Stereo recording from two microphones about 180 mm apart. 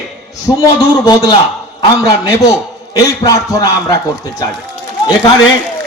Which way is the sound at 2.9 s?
20° left (ahead or behind).